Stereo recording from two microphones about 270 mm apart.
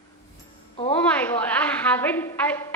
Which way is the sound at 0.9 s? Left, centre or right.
Centre.